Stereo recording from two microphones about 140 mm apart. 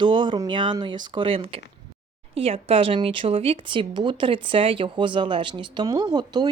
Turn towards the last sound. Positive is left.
turn(degrees=-30)  # may be behind; listen again after turning